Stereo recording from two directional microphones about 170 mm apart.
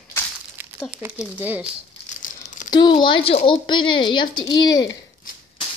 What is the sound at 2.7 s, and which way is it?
Speech, 25° left (ahead or behind).